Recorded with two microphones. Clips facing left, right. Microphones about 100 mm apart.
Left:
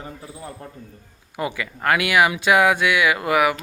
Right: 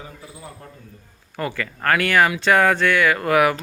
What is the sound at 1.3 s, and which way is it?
Speech, 15° left (ahead or behind).